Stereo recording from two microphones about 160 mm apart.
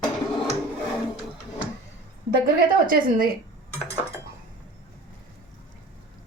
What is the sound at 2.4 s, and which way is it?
Speech, 65° right (ahead or behind).